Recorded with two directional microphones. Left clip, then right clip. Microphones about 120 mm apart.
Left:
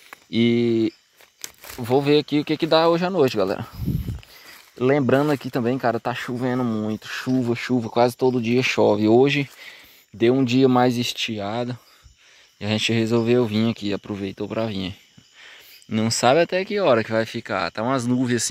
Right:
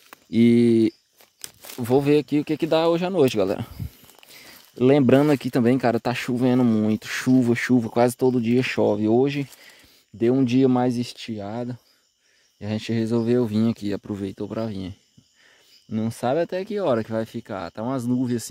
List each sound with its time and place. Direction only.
0.3 s speech: 55° right (ahead or behind)
0.6 s speech: 90° right
1.8 s speech: 55° right (ahead or behind); by 3.3 s 40° right (ahead or behind)
3.3 s speech: 50° right (ahead or behind)
4.9 s speech: 80° right
7.7 s speech: 50° right (ahead or behind)
8.7 s speech: 15° right (ahead or behind)
15.9 s speech: 5° left (ahead or behind)
16.3 s speech: 20° right (ahead or behind); by 18.5 s centre (ahead or behind)